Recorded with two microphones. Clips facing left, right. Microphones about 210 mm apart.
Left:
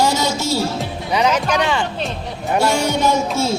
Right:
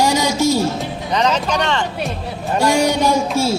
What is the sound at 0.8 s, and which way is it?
Speech, 10° left (ahead or behind).